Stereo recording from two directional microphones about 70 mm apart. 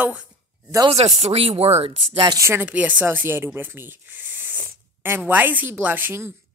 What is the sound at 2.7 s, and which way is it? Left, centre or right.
Speech, right.